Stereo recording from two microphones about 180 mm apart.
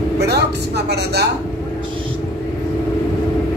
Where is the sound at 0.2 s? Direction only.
65° right (ahead or behind).